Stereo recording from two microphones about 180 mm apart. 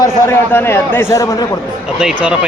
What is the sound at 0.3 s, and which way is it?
A man's voice, 15° left (ahead or behind).